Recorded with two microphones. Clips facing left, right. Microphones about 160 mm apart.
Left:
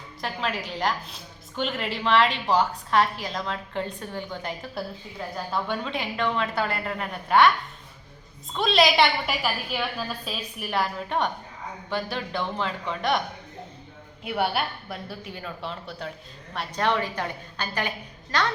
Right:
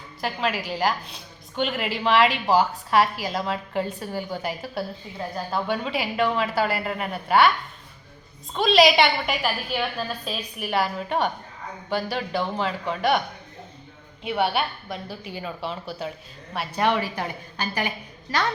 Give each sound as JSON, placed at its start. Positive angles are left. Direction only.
{"t": 0.2, "sound": "a woman's voice", "side_deg": -5}
{"t": 8.5, "sound": "a woman's voice", "side_deg": 0}
{"t": 14.3, "sound": "a woman's voice", "side_deg": 0}